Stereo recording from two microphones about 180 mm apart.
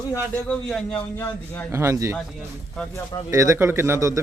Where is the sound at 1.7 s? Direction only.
15° right (ahead or behind).